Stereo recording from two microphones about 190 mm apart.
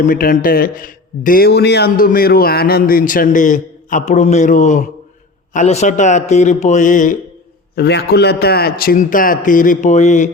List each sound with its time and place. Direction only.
0.1 s a man's voice: 50° left (ahead or behind)
7.8 s a man's voice: 60° left (ahead or behind); by 10.2 s 40° left (ahead or behind)